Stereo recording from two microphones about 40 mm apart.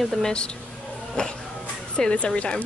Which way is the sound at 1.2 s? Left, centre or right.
Left.